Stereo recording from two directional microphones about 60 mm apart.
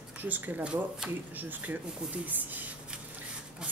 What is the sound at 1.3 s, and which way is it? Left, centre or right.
Speech, right.